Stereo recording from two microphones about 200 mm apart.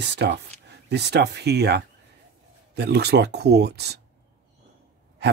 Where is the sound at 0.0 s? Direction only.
55° right (ahead or behind).